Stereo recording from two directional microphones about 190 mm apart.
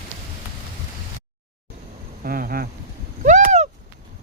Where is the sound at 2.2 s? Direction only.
50° right (ahead or behind).